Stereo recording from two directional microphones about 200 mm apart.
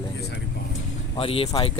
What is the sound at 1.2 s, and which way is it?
Speech, 30° left (ahead or behind).